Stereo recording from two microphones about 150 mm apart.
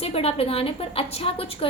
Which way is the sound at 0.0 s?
40° left (ahead or behind).